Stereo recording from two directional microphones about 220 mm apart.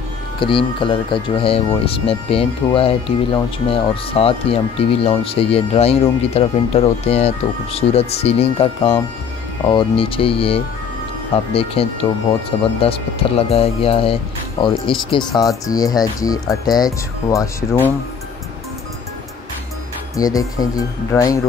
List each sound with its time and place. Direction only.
0.4 s speech: 25° left (ahead or behind)
20.2 s speech: 15° left (ahead or behind)